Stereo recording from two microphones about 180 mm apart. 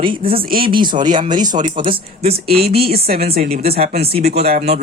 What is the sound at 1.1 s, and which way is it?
Speech, 25° right (ahead or behind).